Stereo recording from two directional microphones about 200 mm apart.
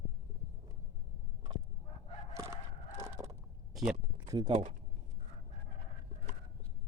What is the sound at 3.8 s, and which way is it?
Speech, centre (ahead or behind).